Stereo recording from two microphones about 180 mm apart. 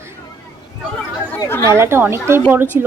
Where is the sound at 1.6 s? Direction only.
15° right (ahead or behind).